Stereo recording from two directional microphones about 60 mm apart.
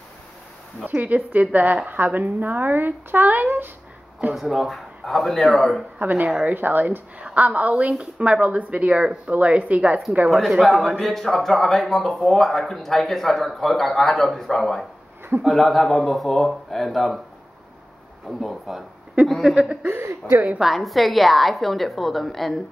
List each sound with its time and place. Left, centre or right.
0.8 s a woman's voice: right
4.3 s speech: centre
5.9 s a woman's voice: right
10.2 s speech: centre
18.4 s speech: centre
19.5 s speech: centre
19.9 s speech: right
20.6 s speech: centre